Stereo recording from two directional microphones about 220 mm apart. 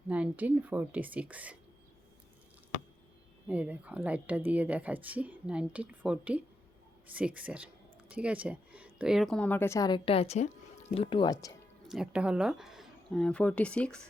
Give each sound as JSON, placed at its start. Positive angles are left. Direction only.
{"t": 0.1, "sound": "a woman's voice", "side_deg": -5}
{"t": 3.5, "sound": "a woman's voice", "side_deg": -5}
{"t": 11.9, "sound": "a woman's voice", "side_deg": -5}